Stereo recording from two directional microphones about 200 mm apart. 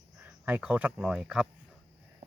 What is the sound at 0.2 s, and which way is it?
Speech, 5° right (ahead or behind).